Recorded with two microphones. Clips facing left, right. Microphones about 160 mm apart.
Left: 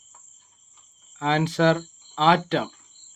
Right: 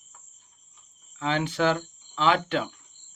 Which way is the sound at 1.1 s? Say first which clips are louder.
Left 4 dB; 35° left (ahead or behind).